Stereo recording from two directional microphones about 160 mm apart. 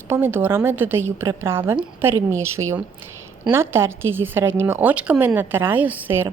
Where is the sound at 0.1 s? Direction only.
15° right (ahead or behind).